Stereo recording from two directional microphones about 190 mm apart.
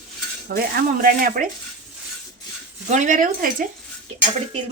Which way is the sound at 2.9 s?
40° right (ahead or behind).